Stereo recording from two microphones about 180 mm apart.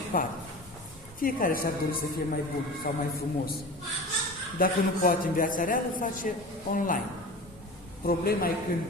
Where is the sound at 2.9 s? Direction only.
65° left (ahead or behind).